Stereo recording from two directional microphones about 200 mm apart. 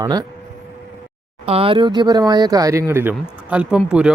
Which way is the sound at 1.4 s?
30° right (ahead or behind).